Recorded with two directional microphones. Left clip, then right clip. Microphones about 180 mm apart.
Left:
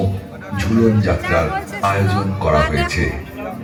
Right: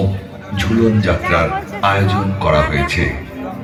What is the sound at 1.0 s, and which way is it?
Speech, 20° right (ahead or behind).